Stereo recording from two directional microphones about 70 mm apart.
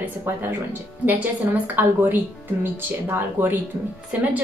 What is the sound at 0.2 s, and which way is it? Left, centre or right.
Speech, right.